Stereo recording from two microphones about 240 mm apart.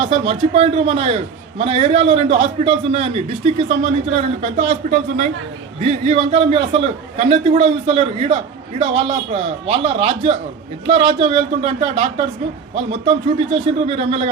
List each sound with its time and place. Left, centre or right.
0.0 s a man's voice: right